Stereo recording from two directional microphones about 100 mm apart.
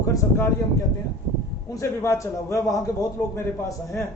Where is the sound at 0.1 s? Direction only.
25° left (ahead or behind).